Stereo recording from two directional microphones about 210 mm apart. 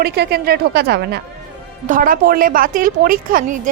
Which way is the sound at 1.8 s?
40° right (ahead or behind).